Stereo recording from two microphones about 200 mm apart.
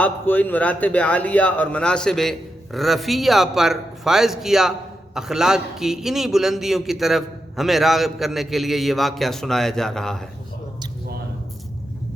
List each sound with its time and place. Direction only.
0.0 s a man's voice: 10° left (ahead or behind)